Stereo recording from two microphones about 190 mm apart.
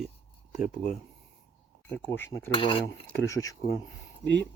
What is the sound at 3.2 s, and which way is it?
Speech, 15° left (ahead or behind).